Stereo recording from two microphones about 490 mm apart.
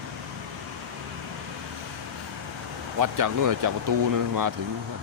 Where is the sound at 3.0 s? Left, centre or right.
Right.